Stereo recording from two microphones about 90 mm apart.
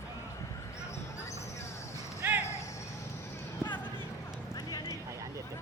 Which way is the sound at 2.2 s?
20° right (ahead or behind).